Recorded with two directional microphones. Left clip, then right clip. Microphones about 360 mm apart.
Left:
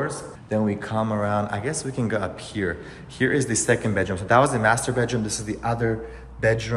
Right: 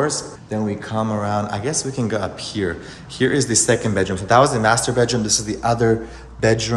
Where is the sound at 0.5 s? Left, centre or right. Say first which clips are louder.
Right 1 dB; centre.